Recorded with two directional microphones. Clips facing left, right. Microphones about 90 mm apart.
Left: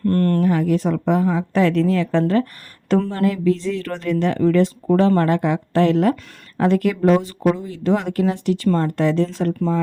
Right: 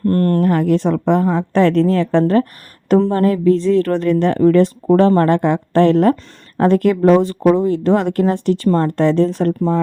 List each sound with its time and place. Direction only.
0.0 s speech: 40° right (ahead or behind)
3.0 s speech: 35° right (ahead or behind); by 9.6 s 55° right (ahead or behind)
9.6 s speech: 40° right (ahead or behind)